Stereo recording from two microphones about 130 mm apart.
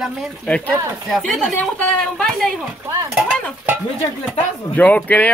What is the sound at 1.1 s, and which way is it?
Speech, centre (ahead or behind).